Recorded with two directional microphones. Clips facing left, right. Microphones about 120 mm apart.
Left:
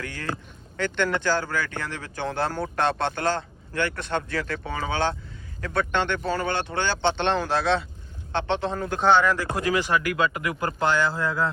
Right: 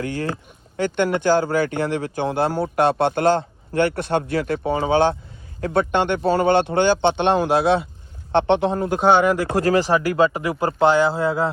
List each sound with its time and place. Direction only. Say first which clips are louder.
0.0 s speech: right 7 dB; 20° right (ahead or behind)
6.1 s speech: right 9 dB; 25° right (ahead or behind)
9.6 s speech: right 6 dB; 40° right (ahead or behind)